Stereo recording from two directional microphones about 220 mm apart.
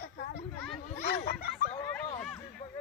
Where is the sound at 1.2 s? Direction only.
45° left (ahead or behind).